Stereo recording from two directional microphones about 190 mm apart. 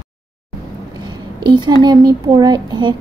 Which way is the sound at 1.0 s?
25° right (ahead or behind).